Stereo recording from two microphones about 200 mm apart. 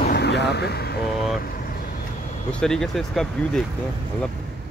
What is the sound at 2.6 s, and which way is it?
Speech, centre (ahead or behind).